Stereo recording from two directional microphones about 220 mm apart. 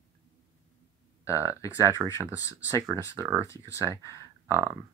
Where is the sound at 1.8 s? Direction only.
15° right (ahead or behind).